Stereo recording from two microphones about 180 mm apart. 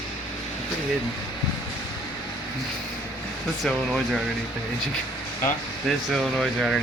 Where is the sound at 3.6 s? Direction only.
Centre (ahead or behind).